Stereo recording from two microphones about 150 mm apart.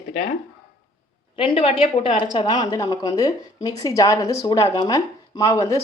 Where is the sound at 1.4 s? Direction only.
40° left (ahead or behind); by 5.8 s 20° left (ahead or behind).